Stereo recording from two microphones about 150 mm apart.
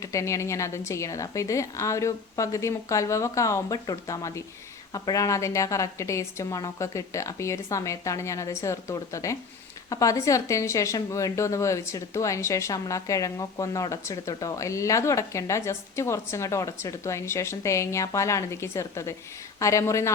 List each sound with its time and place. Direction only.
0.0 s speech: 20° left (ahead or behind)